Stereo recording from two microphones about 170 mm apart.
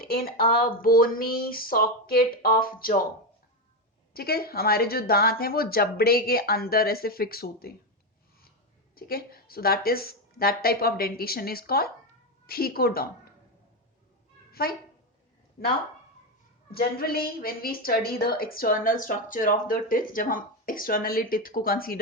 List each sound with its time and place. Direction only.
0.0 s a woman's voice: 60° left (ahead or behind)
4.1 s a woman's voice: 65° left (ahead or behind)
9.0 s a woman's voice: 60° left (ahead or behind)
14.5 s a woman's voice: 60° left (ahead or behind)
16.7 s a woman's voice: 65° left (ahead or behind)